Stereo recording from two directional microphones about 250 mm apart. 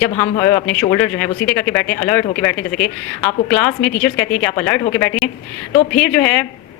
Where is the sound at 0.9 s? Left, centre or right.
Centre.